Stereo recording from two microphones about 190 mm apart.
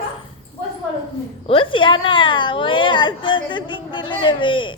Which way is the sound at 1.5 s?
25° left (ahead or behind).